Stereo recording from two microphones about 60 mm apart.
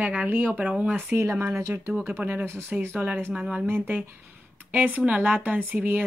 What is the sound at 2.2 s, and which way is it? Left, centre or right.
Speech, right.